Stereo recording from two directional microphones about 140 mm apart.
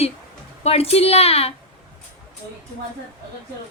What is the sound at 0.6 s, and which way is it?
Speech, 45° left (ahead or behind).